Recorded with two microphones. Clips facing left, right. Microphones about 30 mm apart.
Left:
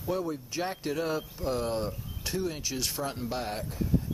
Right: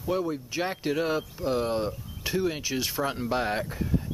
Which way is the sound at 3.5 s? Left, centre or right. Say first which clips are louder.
Right 4 dB; right.